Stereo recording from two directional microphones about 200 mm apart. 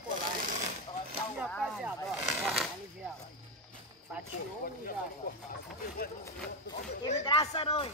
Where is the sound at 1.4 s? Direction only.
Centre (ahead or behind).